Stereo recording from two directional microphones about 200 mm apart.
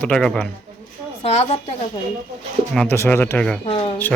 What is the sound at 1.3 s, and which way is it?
Speech, 30° left (ahead or behind).